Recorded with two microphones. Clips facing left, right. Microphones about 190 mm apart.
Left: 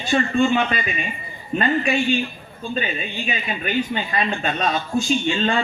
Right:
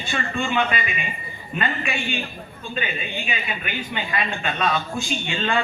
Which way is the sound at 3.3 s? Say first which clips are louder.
Left 9 dB; 40° left (ahead or behind).